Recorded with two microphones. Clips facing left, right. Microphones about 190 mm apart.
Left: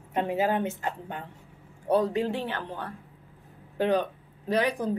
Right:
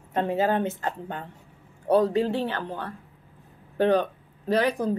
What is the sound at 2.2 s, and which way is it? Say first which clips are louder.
A woman's voice: right 3 dB; 15° left (ahead or behind).